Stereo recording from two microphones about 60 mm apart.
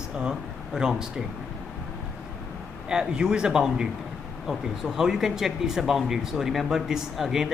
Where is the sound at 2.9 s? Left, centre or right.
Centre.